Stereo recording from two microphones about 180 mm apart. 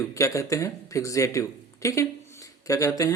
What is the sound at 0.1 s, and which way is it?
Speech, 15° left (ahead or behind).